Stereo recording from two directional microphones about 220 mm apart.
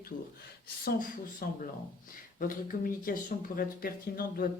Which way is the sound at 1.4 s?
40° left (ahead or behind).